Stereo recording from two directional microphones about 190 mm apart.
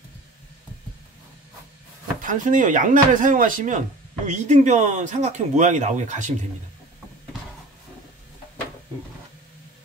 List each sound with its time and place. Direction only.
2.2 s speech: 40° right (ahead or behind)